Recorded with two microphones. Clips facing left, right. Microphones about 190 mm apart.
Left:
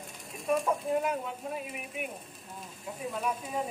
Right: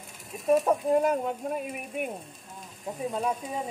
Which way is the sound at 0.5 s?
40° right (ahead or behind).